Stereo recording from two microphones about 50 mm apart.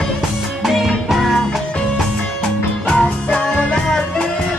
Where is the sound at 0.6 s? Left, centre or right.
Centre.